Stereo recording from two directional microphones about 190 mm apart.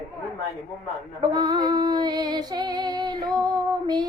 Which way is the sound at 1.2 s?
25° right (ahead or behind).